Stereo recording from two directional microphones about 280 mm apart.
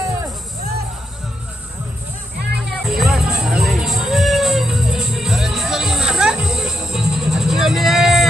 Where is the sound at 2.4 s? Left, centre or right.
Right.